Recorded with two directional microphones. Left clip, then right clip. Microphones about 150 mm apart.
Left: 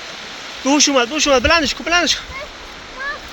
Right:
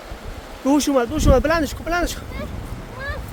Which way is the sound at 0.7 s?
15° right (ahead or behind).